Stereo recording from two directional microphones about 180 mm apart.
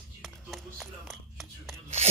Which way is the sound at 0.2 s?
Centre (ahead or behind).